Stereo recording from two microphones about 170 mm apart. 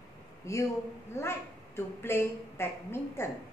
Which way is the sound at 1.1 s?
15° left (ahead or behind).